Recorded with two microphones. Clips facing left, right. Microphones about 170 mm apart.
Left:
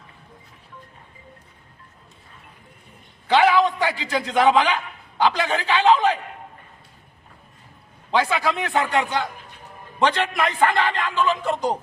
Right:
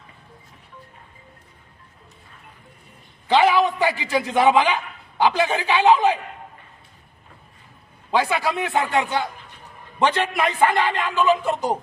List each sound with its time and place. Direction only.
3.2 s a sound: 15° right (ahead or behind)
3.7 s a man's voice: 15° right (ahead or behind)
8.1 s a man's voice: 15° right (ahead or behind)